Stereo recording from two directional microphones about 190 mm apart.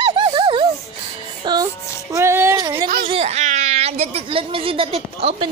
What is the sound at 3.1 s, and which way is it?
A child's voice, 35° right (ahead or behind).